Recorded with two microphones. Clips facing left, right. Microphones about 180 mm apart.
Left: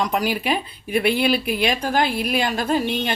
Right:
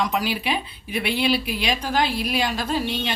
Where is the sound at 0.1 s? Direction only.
50° left (ahead or behind).